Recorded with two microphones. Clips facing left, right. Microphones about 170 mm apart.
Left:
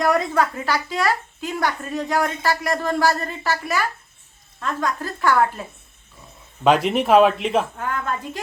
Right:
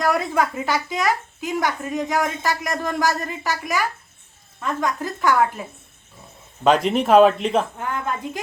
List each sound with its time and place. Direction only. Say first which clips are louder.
0.0 s a woman's voice: left 1 dB; 10° right (ahead or behind)
6.7 s speech: even; 5° left (ahead or behind)
7.8 s a woman's voice: even; 15° right (ahead or behind)